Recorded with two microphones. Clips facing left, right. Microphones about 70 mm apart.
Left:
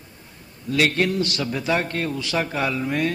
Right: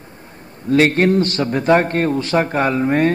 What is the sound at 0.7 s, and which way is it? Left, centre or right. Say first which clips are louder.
A man's voice: right 7 dB; right.